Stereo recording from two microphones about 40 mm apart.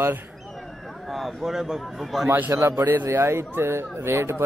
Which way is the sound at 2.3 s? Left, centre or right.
Right.